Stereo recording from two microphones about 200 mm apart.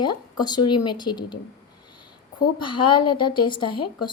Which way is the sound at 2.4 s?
25° left (ahead or behind).